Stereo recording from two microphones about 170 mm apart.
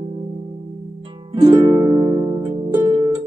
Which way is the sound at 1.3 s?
25° right (ahead or behind).